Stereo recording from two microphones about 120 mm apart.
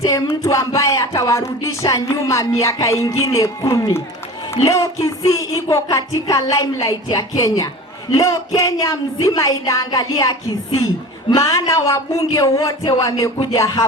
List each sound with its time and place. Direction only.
0.0 s speech: 25° left (ahead or behind)
11.5 s speech: 25° left (ahead or behind)